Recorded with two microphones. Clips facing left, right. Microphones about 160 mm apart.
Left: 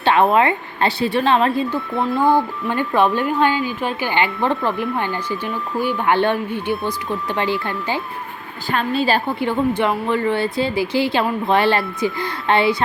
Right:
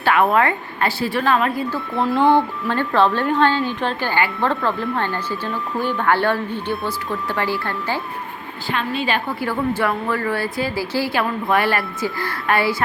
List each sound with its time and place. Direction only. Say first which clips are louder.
0.0 s speech: left 2 dB; 25° left (ahead or behind)
1.9 s speech: right 5 dB; centre (ahead or behind)
2.6 s a woman's voice: left 2 dB; 15° left (ahead or behind)
8.7 s a woman's voice: left 4 dB; 35° left (ahead or behind)
9.4 s speech: left 2 dB; 20° left (ahead or behind)